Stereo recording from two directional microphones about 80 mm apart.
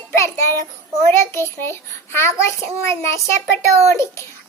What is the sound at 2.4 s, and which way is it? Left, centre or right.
Child singing, left.